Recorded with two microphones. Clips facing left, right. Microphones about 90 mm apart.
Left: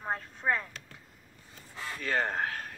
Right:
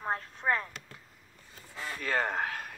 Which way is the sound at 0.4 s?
5° right (ahead or behind).